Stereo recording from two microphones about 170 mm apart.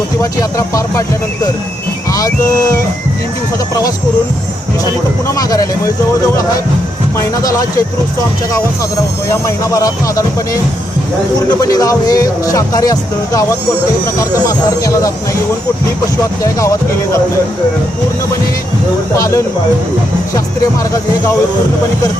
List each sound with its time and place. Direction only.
0.2 s speech: 20° left (ahead or behind)
5.3 s speech: 20° left (ahead or behind)
7.4 s speech: 20° left (ahead or behind)
9.3 s speech: 20° left (ahead or behind)
11.6 s speech: 20° left (ahead or behind)
14.4 s speech: 20° left (ahead or behind)
16.4 s speech: 20° left (ahead or behind)
19.1 s speech: 20° left (ahead or behind)